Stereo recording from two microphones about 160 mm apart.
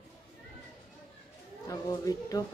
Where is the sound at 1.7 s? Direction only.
20° left (ahead or behind).